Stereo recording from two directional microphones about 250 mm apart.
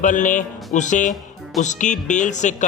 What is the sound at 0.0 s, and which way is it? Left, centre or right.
Speech, left.